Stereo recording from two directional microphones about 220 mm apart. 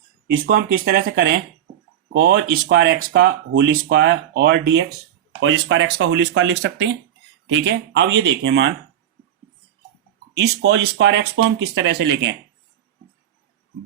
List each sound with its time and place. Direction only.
0.3 s speech: 40° right (ahead or behind)
10.3 s speech: 50° right (ahead or behind)